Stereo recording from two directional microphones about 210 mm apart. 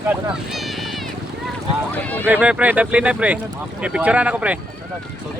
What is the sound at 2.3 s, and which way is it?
Speech, 5° right (ahead or behind).